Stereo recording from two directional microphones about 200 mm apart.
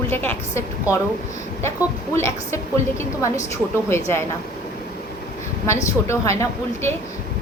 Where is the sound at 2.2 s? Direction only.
15° left (ahead or behind).